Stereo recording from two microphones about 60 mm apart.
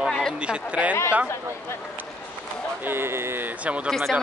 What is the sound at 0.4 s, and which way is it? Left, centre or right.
Speech, centre.